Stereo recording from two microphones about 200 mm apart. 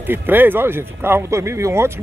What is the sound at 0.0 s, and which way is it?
Speech, 10° right (ahead or behind).